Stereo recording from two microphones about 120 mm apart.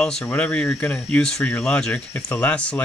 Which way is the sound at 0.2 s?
15° left (ahead or behind).